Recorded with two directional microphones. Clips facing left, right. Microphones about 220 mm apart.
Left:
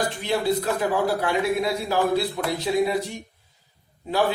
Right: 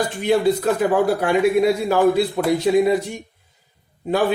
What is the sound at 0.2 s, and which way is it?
Speech, 55° right (ahead or behind).